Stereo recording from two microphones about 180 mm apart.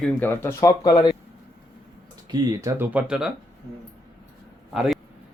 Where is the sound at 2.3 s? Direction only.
20° right (ahead or behind).